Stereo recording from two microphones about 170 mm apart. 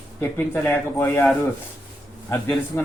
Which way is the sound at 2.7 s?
15° left (ahead or behind).